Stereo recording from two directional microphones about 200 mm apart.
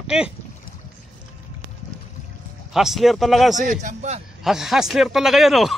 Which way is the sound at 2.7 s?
Centre (ahead or behind).